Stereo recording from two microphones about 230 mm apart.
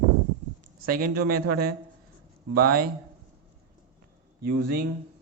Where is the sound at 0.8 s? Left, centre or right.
Right.